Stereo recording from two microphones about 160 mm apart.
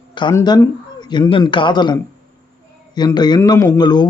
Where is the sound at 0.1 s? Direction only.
30° left (ahead or behind).